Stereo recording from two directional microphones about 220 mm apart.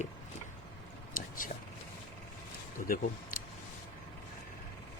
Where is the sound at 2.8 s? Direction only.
40° left (ahead or behind).